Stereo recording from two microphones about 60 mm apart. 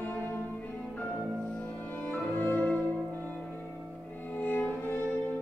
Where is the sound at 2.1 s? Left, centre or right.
Left.